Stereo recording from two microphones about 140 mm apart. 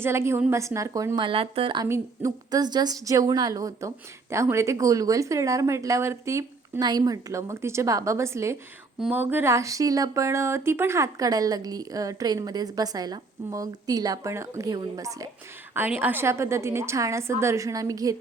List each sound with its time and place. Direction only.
0.0 s a woman's voice: 20° right (ahead or behind); by 1.9 s 35° right (ahead or behind)
1.9 s a woman's voice: 25° right (ahead or behind)
15.7 s a woman's voice: 15° right (ahead or behind)